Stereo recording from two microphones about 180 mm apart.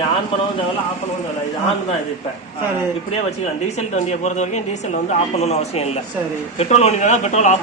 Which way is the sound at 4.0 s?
40° left (ahead or behind).